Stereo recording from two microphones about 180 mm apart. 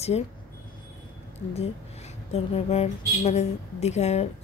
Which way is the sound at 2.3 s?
35° left (ahead or behind).